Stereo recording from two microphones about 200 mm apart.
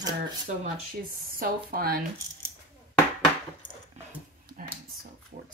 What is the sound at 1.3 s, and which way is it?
Speech, 50° right (ahead or behind).